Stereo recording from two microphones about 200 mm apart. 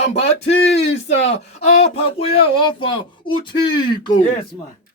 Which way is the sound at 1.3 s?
35° left (ahead or behind).